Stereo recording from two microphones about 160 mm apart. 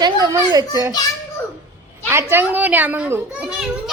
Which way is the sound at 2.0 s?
15° right (ahead or behind).